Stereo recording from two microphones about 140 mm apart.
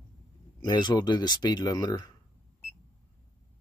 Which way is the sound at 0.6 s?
30° left (ahead or behind).